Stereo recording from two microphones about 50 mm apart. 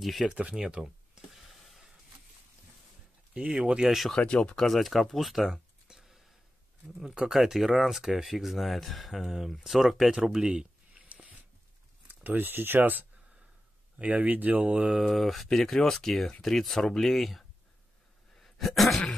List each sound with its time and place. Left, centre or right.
0.0 s speech: centre
0.3 s speech: right
0.8 s a sound: centre
3.3 s speech: right
3.8 s speech: centre
11.1 s a sound: right
12.1 s speech: right
14.9 s speech: centre
18.4 s a sound: centre